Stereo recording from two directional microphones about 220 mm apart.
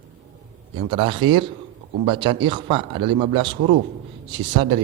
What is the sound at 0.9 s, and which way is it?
A man's voice, 20° right (ahead or behind).